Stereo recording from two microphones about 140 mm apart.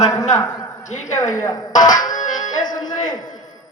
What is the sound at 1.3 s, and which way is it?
Speech, 25° left (ahead or behind).